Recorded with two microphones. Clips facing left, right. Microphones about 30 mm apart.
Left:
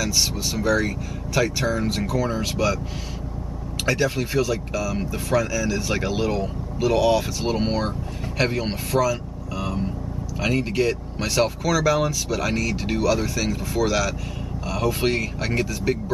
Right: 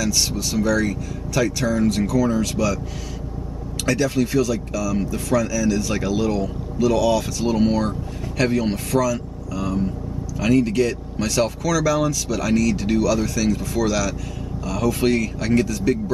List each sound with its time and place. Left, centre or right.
0.0 s speech: centre
3.8 s speech: centre